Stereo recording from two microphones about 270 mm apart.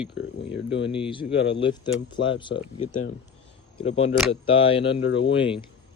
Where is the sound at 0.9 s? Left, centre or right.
Centre.